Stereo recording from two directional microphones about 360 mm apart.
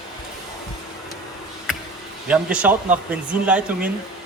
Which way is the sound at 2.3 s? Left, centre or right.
Centre.